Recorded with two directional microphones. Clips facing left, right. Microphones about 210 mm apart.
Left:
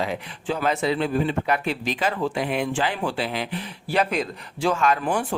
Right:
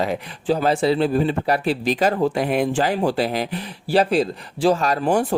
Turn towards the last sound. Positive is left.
turn(degrees=-40)  # may be behind; listen again after turning